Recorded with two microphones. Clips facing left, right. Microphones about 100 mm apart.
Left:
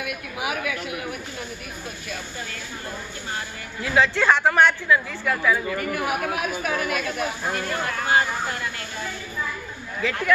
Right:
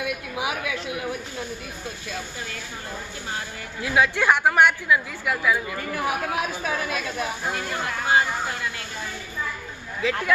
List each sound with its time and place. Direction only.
0.0 s speech: 25° right (ahead or behind)
3.8 s a woman's voice: 10° right (ahead or behind)
5.9 s speech: 25° right (ahead or behind); by 8.2 s 10° right (ahead or behind)
10.0 s speech: 20° right (ahead or behind)